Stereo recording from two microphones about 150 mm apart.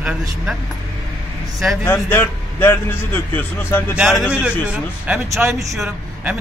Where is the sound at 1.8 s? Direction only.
15° left (ahead or behind).